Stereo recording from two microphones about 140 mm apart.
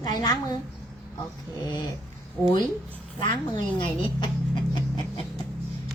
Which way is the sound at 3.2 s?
30° left (ahead or behind).